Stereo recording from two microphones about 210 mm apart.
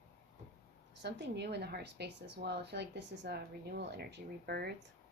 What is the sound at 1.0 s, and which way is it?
A woman's voice, 55° right (ahead or behind).